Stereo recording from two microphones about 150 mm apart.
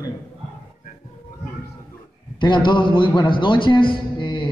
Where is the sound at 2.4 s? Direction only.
30° left (ahead or behind).